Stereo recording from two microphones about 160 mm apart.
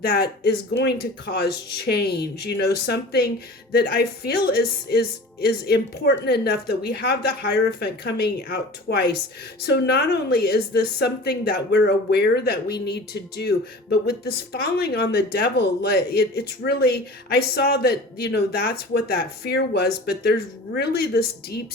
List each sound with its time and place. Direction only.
0.0 s a woman's voice: 75° left (ahead or behind)